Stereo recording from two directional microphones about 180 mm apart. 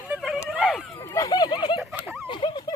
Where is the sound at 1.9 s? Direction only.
10° right (ahead or behind).